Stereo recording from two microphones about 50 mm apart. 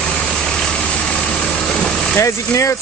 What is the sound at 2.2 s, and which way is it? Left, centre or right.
Speech, left.